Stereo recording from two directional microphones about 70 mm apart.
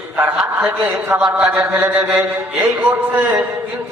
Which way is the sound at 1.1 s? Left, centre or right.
Centre.